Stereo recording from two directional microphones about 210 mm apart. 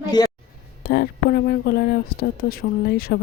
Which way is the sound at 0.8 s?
50° left (ahead or behind).